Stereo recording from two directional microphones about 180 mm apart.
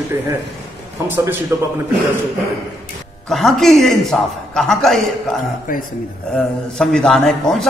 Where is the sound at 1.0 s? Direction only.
10° right (ahead or behind).